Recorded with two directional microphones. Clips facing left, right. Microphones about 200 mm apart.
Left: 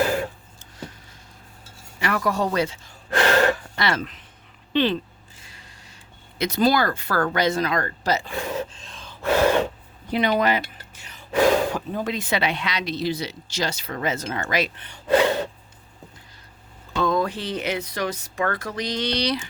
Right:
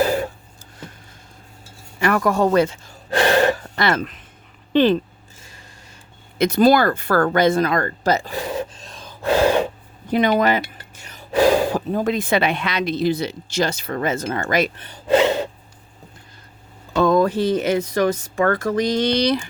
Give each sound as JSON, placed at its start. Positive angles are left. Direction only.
{"t": 2.0, "sound": "speech", "side_deg": -50}
{"t": 3.2, "sound": "gasp", "side_deg": -25}
{"t": 3.5, "sound": "a sound", "side_deg": -45}
{"t": 4.7, "sound": "speech", "side_deg": -45}
{"t": 5.4, "sound": "a sound", "side_deg": -45}
{"t": 6.4, "sound": "speech", "side_deg": -50}
{"t": 8.5, "sound": "gasp", "side_deg": -40}
{"t": 9.2, "sound": "gasp", "side_deg": -15}
{"t": 10.1, "sound": "a sound", "side_deg": -50}
{"t": 11.9, "sound": "speech", "side_deg": -50}
{"t": 15.1, "sound": "gasp", "side_deg": -20}
{"t": 16.9, "sound": "speech", "side_deg": -50}